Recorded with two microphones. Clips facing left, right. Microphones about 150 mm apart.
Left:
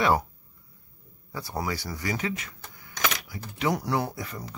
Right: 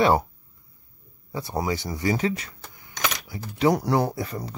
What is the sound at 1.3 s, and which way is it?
Speech, 20° right (ahead or behind).